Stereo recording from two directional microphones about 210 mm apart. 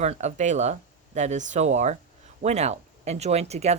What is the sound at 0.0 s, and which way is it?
Speech, 30° right (ahead or behind).